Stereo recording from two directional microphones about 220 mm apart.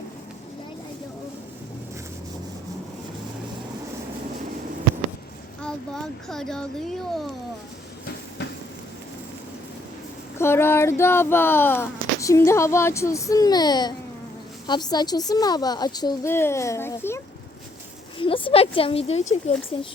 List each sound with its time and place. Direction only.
5.6 s speech: centre (ahead or behind)
10.3 s speech: 10° left (ahead or behind)
18.2 s speech: 25° left (ahead or behind)